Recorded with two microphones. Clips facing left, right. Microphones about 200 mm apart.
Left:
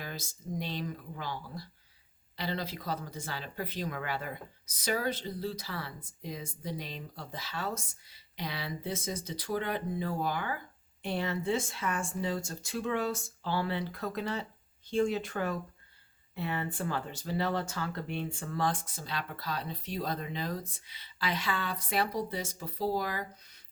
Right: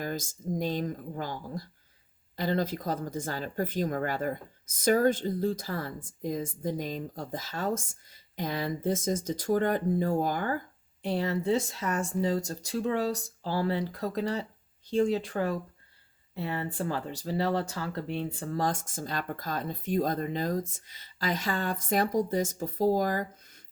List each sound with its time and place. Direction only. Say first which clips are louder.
0.0 s speech: right 8 dB; 45° right (ahead or behind)